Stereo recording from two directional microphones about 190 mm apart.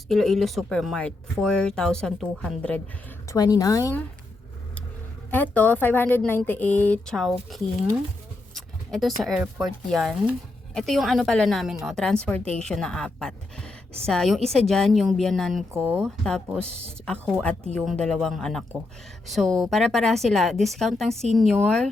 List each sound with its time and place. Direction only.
0.1 s a woman's voice: centre (ahead or behind)
3.2 s a woman's voice: 20° left (ahead or behind)
5.3 s a woman's voice: 10° left (ahead or behind)
15.7 s speech: 15° right (ahead or behind)
16.0 s a woman's voice: 5° left (ahead or behind)
17.4 s a woman's voice: 5° left (ahead or behind)